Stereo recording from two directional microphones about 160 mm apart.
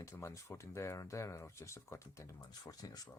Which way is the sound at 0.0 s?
20° left (ahead or behind).